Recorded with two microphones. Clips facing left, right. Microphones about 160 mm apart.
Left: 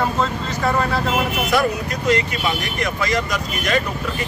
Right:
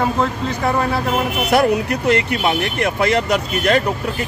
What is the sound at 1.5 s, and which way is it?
Speech, 65° right (ahead or behind).